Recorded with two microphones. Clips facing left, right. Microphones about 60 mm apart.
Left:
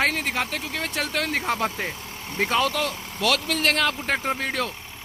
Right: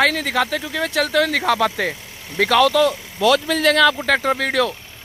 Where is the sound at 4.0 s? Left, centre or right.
Right.